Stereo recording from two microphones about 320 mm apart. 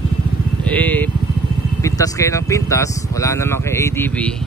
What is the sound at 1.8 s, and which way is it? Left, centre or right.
Speech, centre.